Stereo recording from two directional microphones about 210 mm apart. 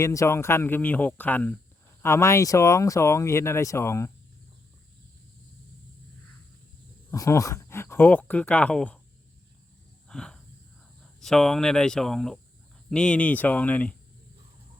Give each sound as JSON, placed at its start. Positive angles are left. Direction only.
{"t": 0.0, "sound": "speech", "side_deg": 15}
{"t": 7.1, "sound": "speech", "side_deg": 15}
{"t": 10.1, "sound": "a sound", "side_deg": 5}
{"t": 11.2, "sound": "speech", "side_deg": 0}